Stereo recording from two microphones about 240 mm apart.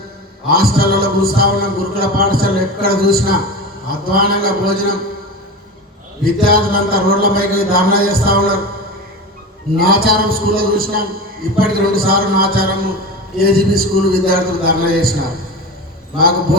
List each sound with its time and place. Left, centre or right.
0.5 s a man's voice: right
6.2 s a man's voice: right
9.7 s a man's voice: right